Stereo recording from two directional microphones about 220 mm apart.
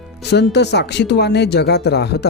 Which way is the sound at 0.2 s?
50° left (ahead or behind).